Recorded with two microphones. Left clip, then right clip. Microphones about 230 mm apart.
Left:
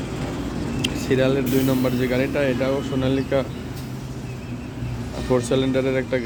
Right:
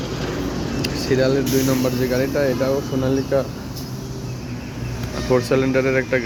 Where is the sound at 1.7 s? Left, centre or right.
Centre.